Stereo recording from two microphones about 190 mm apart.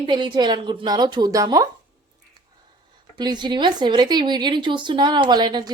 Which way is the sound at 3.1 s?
20° right (ahead or behind).